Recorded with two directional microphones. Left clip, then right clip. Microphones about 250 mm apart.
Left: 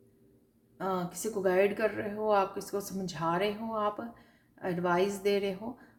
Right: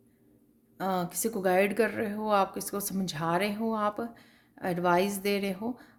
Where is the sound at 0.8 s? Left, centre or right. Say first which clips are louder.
Right 3 dB; right.